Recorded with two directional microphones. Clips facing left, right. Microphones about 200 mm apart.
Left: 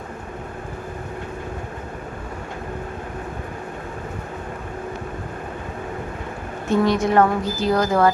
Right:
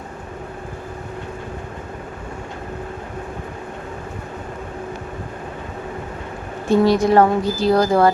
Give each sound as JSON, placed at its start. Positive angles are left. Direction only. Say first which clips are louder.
{"t": 6.7, "sound": "speech", "louder": "right 4 dB", "side_deg": -35}